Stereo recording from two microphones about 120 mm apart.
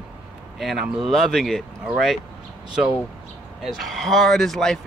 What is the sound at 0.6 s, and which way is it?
Speech, centre (ahead or behind).